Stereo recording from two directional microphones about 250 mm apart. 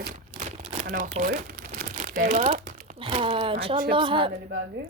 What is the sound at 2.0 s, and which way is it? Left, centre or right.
Crumpling, right.